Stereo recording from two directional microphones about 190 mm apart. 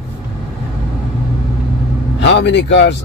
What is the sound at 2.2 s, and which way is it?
Speech, 65° left (ahead or behind).